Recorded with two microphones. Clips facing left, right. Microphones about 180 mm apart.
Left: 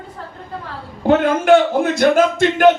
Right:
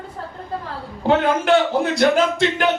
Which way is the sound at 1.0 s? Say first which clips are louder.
Left 4 dB; 50° left (ahead or behind).